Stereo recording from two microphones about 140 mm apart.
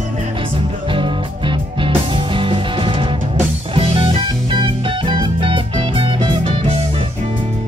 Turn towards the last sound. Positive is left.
turn(degrees=-40)  # may be behind; listen again after turning